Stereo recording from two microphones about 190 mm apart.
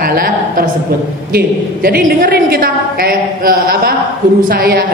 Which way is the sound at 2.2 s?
50° right (ahead or behind).